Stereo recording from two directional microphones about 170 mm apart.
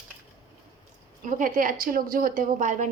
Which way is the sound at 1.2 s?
50° right (ahead or behind).